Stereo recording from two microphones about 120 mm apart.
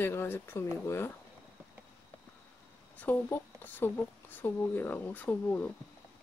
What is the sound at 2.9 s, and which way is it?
Speech, 15° left (ahead or behind).